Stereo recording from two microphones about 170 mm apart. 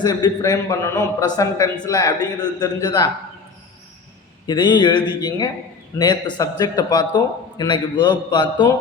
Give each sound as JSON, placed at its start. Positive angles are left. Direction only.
{"t": 0.0, "sound": "a man's voice", "side_deg": 25}
{"t": 4.4, "sound": "a man's voice", "side_deg": 25}